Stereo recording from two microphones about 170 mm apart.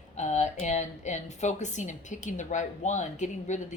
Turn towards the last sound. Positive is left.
turn(degrees=45)  # may be behind; listen again after turning